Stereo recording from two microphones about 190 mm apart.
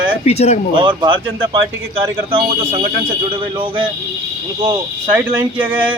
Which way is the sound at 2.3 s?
30° right (ahead or behind).